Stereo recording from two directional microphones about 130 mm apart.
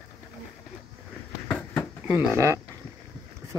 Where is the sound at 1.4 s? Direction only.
10° left (ahead or behind).